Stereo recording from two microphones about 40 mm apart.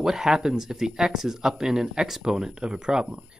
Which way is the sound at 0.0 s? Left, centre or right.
Centre.